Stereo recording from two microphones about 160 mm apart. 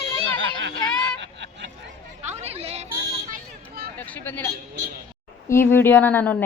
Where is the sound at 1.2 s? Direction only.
90° right.